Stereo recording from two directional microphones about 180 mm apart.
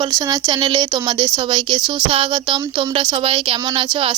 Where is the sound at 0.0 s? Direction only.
20° right (ahead or behind).